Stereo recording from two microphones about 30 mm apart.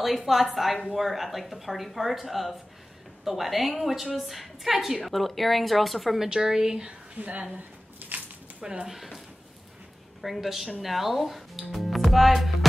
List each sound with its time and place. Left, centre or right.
0.0 s a woman's voice: centre
6.1 s a woman's voice: centre
7.2 s speech: right
8.8 s speech: centre
10.2 s a woman's voice: centre
11.9 s music: centre